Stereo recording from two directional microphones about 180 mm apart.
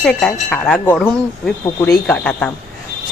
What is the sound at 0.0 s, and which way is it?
Speech, 5° left (ahead or behind).